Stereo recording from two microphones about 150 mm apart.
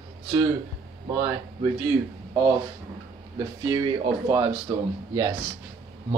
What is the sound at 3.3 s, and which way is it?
Speech, 25° right (ahead or behind).